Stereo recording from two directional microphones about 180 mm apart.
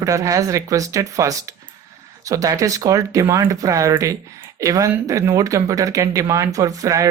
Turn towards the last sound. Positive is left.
turn(degrees=-20)  # may be behind; listen again after turning